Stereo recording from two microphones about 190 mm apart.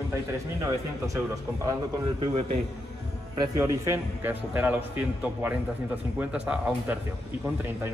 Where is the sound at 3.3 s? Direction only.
20° right (ahead or behind).